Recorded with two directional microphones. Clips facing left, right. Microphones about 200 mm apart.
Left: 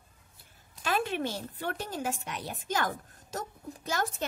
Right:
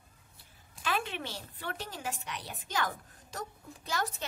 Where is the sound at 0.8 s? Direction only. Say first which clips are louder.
Left 5 dB; 45° left (ahead or behind).